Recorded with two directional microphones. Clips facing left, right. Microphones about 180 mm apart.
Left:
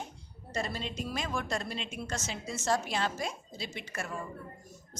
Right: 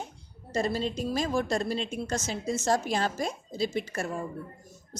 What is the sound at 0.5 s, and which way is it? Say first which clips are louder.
A woman's voice: right 7 dB; 40° right (ahead or behind).